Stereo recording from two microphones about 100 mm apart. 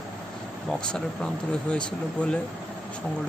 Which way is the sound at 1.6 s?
10° left (ahead or behind).